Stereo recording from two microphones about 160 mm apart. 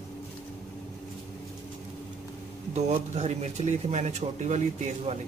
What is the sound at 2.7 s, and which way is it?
Speech, 45° right (ahead or behind).